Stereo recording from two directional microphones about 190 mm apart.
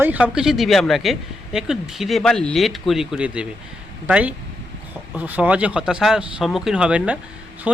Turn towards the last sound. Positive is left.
turn(degrees=-5)  # may be behind; listen again after turning